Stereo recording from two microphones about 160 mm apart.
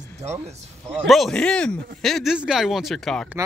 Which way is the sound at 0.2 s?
45° right (ahead or behind).